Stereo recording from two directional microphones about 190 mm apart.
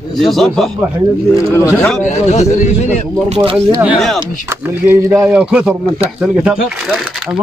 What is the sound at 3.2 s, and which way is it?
Speech, 35° right (ahead or behind).